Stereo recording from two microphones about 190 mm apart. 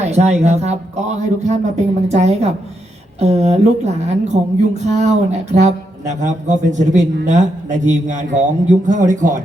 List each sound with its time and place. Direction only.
0.0 s speech: 35° right (ahead or behind)